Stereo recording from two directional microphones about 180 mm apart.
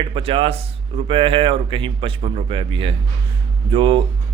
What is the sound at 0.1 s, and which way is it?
Speech, 30° right (ahead or behind).